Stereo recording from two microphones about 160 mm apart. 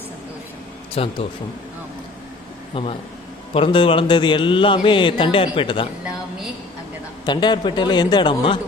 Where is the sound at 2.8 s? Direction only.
30° left (ahead or behind).